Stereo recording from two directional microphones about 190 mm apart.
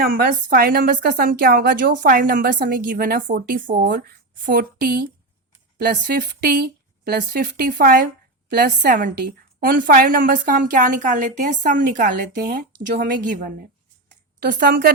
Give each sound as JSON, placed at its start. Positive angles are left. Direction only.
{"t": 0.0, "sound": "speech", "side_deg": -50}